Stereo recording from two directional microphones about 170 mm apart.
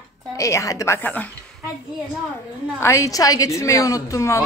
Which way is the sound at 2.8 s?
15° left (ahead or behind).